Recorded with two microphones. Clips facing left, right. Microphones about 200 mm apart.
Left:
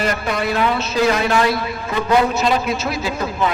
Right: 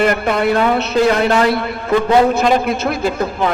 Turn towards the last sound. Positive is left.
turn(degrees=-55)  # may be behind; listen again after turning